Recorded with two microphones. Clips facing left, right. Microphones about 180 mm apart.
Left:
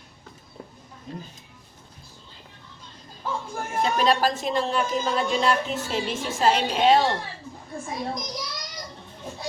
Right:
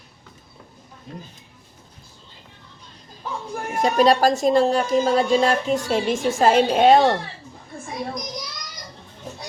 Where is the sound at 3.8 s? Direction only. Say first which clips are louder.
Right 5 dB; 40° right (ahead or behind).